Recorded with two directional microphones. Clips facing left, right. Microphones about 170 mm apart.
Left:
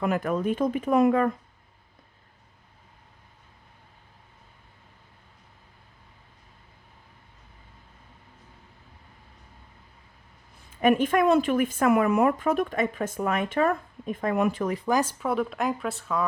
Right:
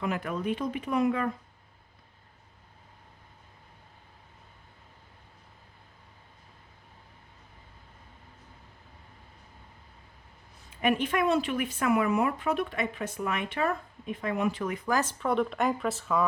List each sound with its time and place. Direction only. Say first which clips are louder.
0.0 s speech: left 5 dB; 50° left (ahead or behind)
10.8 s speech: left 6 dB; 45° left (ahead or behind)
14.8 s speech: left 2 dB; 15° left (ahead or behind)